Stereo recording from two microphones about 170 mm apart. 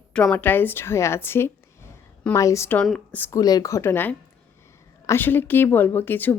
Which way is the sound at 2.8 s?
5° left (ahead or behind).